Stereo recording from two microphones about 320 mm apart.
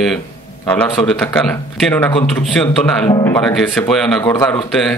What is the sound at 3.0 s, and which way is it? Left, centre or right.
Speech, centre.